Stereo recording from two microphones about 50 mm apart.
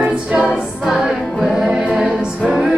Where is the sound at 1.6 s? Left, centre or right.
Right.